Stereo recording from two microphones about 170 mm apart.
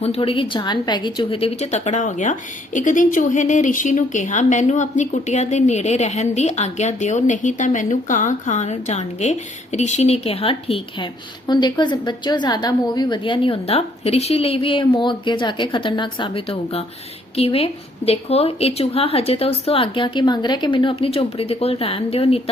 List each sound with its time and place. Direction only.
0.0 s a woman's voice: 35° left (ahead or behind)